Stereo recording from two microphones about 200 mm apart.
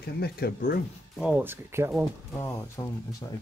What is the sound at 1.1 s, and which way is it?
Speech, 5° right (ahead or behind).